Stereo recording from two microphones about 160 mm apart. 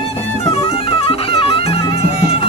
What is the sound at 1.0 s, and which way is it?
Music, 35° left (ahead or behind).